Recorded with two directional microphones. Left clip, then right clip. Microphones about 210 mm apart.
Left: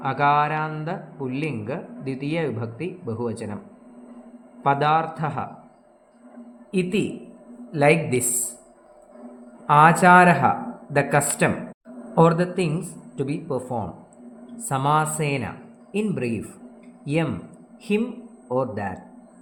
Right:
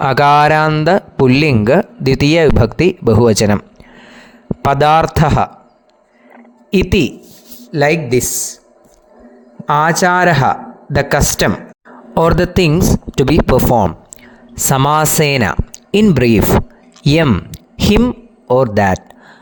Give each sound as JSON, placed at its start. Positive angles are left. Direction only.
{"t": 0.0, "sound": "speech", "side_deg": -55}
{"t": 4.6, "sound": "speech", "side_deg": -55}
{"t": 6.7, "sound": "speech", "side_deg": -50}
{"t": 7.7, "sound": "speech", "side_deg": -35}
{"t": 9.6, "sound": "a man's voice", "side_deg": -40}